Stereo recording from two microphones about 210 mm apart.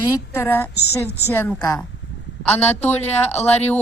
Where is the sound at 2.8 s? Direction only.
30° left (ahead or behind).